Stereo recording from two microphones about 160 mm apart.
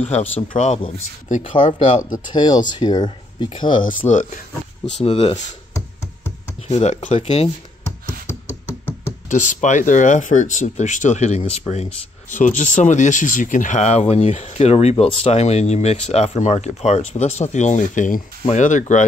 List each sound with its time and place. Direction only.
0.4 s speech: 40° left (ahead or behind); by 4.2 s 20° left (ahead or behind)
5.0 s speech: 35° left (ahead or behind)
6.7 s speech: 45° left (ahead or behind)
9.3 s speech: 50° left (ahead or behind)